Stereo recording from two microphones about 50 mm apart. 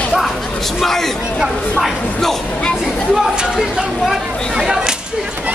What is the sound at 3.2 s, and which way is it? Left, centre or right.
Speech, centre.